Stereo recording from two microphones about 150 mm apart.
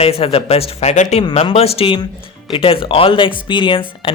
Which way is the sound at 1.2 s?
35° left (ahead or behind).